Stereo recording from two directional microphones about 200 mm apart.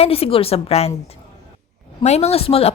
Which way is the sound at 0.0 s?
30° left (ahead or behind).